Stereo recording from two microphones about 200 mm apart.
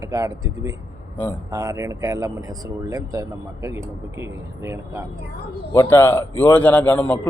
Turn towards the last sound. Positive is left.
turn(degrees=5)  # may be behind; listen again after turning